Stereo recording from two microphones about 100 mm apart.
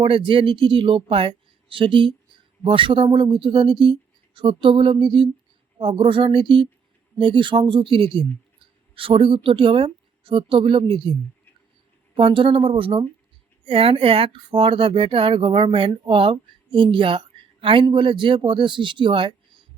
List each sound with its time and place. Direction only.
0.0 s speech: 60° right (ahead or behind)
12.1 s speech: 60° right (ahead or behind)